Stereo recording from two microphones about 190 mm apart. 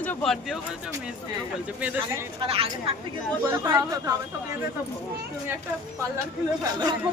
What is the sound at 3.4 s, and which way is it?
Speech, 15° right (ahead or behind).